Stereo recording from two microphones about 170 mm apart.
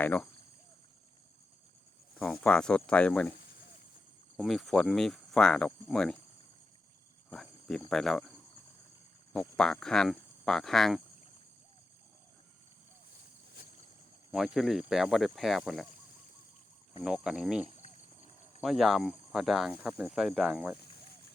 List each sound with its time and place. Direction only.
0.0 s speech: 10° left (ahead or behind)
2.1 s speech: 5° left (ahead or behind)
4.4 s speech: centre (ahead or behind)
7.3 s cricket: 5° left (ahead or behind)
7.9 s speech: centre (ahead or behind)
9.3 s speech: 5° left (ahead or behind)
14.3 s speech: centre (ahead or behind)
17.0 s speech: 5° right (ahead or behind)
17.8 s a sound: 45° left (ahead or behind)
18.6 s speech: centre (ahead or behind)